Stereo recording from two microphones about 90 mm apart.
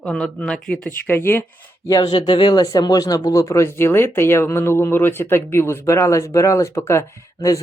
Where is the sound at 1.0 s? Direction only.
25° left (ahead or behind).